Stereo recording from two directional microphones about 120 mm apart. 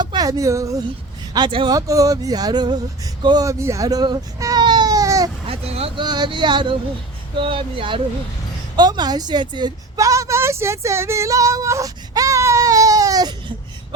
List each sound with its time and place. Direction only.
0.0 s speech: 35° right (ahead or behind)
1.3 s male singing: 40° right (ahead or behind)
1.7 s male singing: 30° right (ahead or behind)
4.6 s baby cry: 40° right (ahead or behind)
5.5 s vehicle: 55° right (ahead or behind)
6.0 s male singing: 40° right (ahead or behind)
7.3 s speech: 50° right (ahead or behind)
8.7 s a woman's voice: 35° right (ahead or behind)